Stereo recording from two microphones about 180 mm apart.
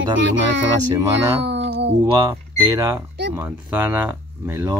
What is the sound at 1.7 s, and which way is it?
Music, 75° right (ahead or behind).